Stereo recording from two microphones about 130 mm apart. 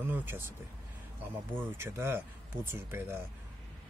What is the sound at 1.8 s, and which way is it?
Speech, 20° right (ahead or behind).